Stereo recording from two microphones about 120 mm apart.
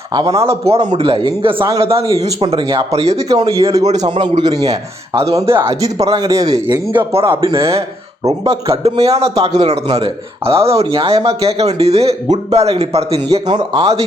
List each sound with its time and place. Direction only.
0.1 s a man's voice: 35° right (ahead or behind)
0.4 s a man's voice: 55° right (ahead or behind)
2.6 s a man's voice: 35° right (ahead or behind)
2.9 s speech: 60° right (ahead or behind)
3.2 s a man's voice: 30° right (ahead or behind)
3.6 s speech: 60° right (ahead or behind)
3.9 s a man's voice: 40° right (ahead or behind)
6.9 s a man's voice: 50° right (ahead or behind)
13.5 s a man's voice: 40° right (ahead or behind)